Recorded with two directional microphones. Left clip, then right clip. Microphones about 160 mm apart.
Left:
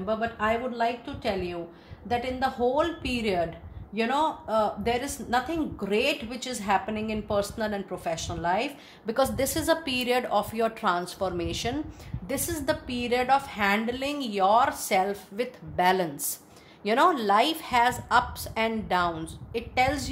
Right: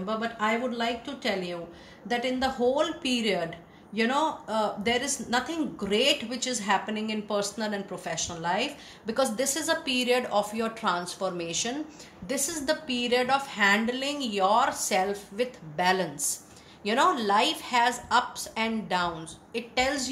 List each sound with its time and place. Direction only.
0.0 s a woman's voice: 40° left (ahead or behind)